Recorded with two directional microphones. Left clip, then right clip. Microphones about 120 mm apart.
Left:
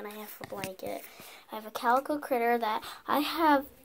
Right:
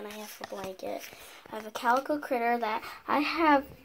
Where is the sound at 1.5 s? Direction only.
30° left (ahead or behind).